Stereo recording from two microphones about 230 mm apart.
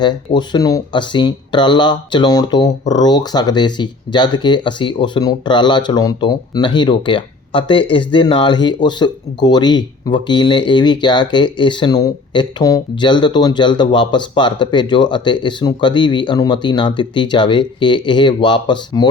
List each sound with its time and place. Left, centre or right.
0.0 s speech: centre